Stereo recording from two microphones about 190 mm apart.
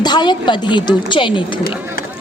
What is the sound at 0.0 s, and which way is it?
A woman's voice, 25° left (ahead or behind).